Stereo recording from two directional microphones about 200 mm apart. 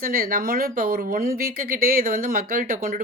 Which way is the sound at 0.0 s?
45° right (ahead or behind).